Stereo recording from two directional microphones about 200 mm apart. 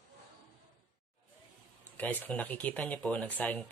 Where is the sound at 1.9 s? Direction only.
5° left (ahead or behind).